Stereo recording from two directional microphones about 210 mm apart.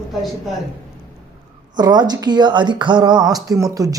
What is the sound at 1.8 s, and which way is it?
A woman's voice, 20° right (ahead or behind).